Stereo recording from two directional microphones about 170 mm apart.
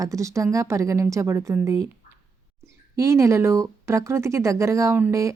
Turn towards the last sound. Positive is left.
turn(degrees=-20)  # may be behind; listen again after turning